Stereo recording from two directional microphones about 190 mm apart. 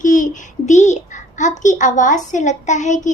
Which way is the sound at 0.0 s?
45° left (ahead or behind).